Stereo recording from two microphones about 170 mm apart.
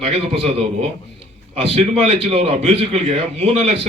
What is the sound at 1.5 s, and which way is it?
A man's voice, 35° right (ahead or behind).